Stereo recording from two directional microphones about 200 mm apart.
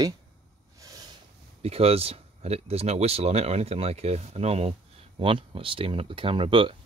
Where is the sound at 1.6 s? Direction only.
30° right (ahead or behind).